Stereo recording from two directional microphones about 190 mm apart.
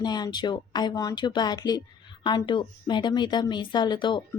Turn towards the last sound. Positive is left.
turn(degrees=25)  # may be behind; listen again after turning